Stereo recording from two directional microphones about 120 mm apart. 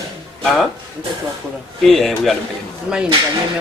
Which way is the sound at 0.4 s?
Centre (ahead or behind).